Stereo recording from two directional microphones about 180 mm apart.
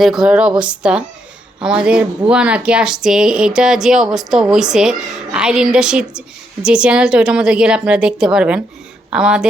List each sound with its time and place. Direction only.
0.0 s speech: centre (ahead or behind)